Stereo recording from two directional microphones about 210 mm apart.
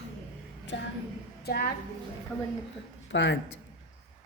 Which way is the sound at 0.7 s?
60° left (ahead or behind).